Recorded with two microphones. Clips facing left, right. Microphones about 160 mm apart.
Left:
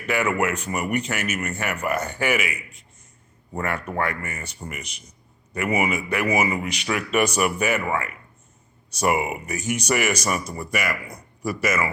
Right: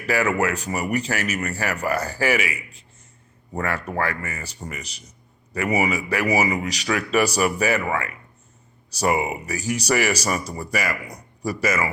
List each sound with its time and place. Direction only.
0.0 s speech: 35° right (ahead or behind)
3.9 s speech: 30° right (ahead or behind)